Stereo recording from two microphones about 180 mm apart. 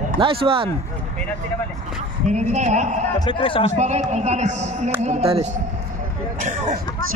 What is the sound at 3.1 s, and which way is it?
Speech, 25° left (ahead or behind).